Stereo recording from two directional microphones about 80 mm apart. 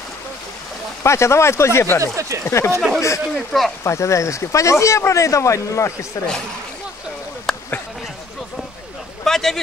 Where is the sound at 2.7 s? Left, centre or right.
Centre.